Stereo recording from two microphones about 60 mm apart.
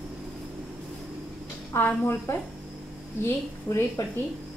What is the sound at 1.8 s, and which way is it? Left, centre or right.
A woman's voice, left.